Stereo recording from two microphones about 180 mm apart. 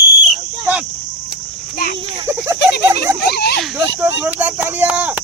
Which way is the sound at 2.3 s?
15° right (ahead or behind).